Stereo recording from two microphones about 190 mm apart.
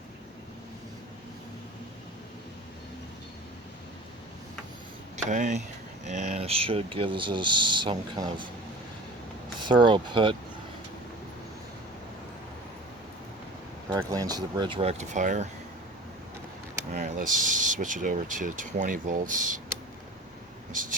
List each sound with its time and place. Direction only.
5.1 s speech: 40° right (ahead or behind); by 8.3 s 25° right (ahead or behind)
9.6 s speech: 25° right (ahead or behind)
14.1 s speech: 20° right (ahead or behind); by 15.4 s 40° right (ahead or behind)
16.9 s speech: 45° right (ahead or behind)